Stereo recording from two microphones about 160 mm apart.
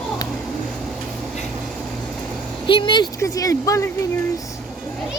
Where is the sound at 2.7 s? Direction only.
30° left (ahead or behind).